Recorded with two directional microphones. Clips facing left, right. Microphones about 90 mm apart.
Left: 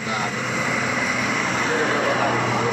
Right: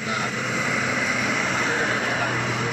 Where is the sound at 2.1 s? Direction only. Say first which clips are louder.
Left 5 dB; 35° left (ahead or behind).